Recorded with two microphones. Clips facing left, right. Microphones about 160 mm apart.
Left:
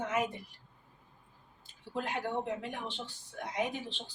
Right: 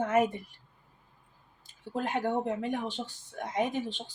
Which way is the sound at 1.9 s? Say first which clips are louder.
Right 5 dB; 45° right (ahead or behind).